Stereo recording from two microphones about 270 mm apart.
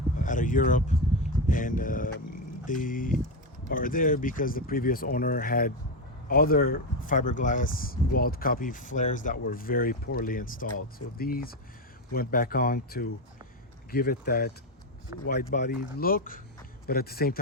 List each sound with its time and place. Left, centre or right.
0.2 s speech: left